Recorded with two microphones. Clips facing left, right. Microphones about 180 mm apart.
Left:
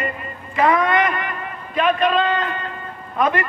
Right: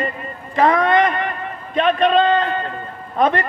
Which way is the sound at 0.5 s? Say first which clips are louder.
Right 2 dB; 30° right (ahead or behind).